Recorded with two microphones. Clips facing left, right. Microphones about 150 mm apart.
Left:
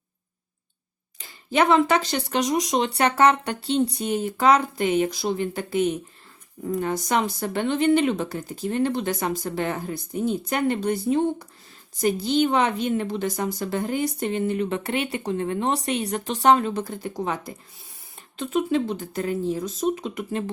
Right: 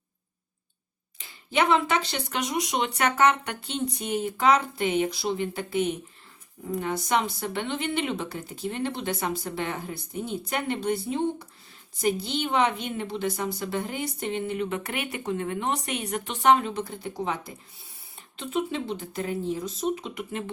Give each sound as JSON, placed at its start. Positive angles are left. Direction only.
{"t": 1.2, "sound": "a woman's voice", "side_deg": 40}
{"t": 6.8, "sound": "a woman's voice", "side_deg": 40}